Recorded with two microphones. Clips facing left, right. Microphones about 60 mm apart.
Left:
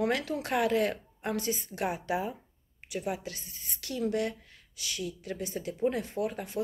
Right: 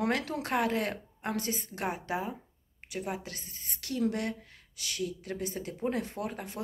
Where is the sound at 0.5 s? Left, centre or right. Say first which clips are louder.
Left 3 dB; right.